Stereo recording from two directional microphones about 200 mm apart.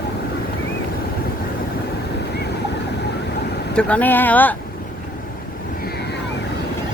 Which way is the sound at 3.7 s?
5° left (ahead or behind).